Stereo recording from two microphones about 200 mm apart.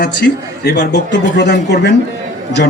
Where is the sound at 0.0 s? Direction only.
55° left (ahead or behind).